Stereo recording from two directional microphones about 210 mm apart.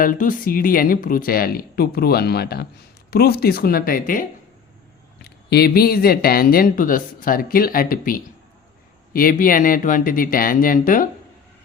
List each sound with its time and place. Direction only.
0.0 s speech: 40° left (ahead or behind)